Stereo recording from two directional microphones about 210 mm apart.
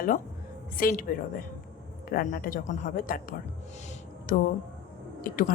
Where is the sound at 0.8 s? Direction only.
45° left (ahead or behind).